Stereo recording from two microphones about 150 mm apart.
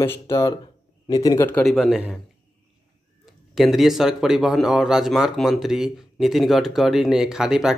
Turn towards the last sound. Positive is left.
turn(degrees=-5)  # may be behind; listen again after turning